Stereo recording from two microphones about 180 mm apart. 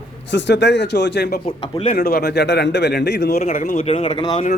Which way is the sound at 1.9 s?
65° left (ahead or behind).